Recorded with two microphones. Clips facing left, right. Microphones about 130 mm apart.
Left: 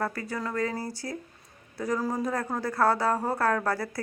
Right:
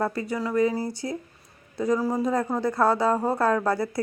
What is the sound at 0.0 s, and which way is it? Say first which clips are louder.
A woman's voice: right 4 dB; 20° right (ahead or behind).